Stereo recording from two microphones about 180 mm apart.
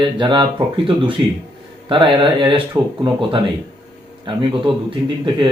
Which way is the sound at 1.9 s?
25° right (ahead or behind).